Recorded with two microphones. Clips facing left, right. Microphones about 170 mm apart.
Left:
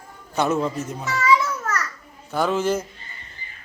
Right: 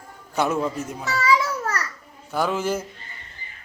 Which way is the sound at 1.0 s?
35° right (ahead or behind).